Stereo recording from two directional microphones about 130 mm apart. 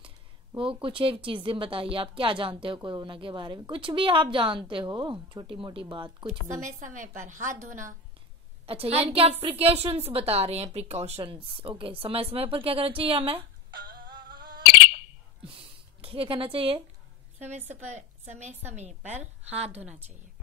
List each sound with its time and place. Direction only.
0.6 s speech: 40° right (ahead or behind)
6.6 s a woman's voice: 80° right
8.6 s a woman's voice: 50° right (ahead or behind)
11.5 s a woman's voice: 40° right (ahead or behind)
15.4 s a sound: 45° right (ahead or behind)
17.4 s a woman's voice: 60° right (ahead or behind)